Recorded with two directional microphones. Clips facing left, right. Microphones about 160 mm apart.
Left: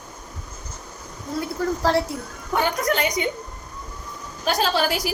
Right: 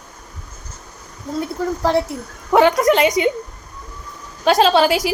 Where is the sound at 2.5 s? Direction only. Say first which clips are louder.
Right 9 dB; 90° right.